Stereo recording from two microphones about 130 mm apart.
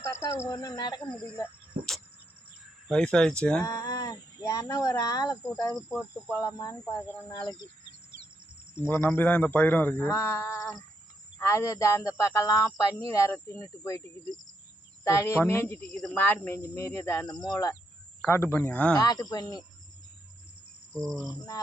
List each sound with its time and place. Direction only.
0.0 s speech: 20° left (ahead or behind)
1.7 s a sound: 80° right
2.9 s a man's voice: 5° left (ahead or behind)
3.6 s speech: 25° left (ahead or behind)
7.3 s speech: 30° left (ahead or behind)
8.7 s a man's voice: 15° left (ahead or behind)
15.0 s a man's voice: 20° left (ahead or behind)
18.9 s speech: 30° left (ahead or behind)